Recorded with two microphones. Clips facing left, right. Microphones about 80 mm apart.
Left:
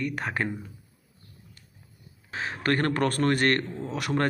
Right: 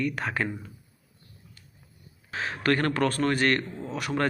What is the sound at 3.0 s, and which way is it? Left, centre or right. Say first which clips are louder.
Speech: left 1 dB; left.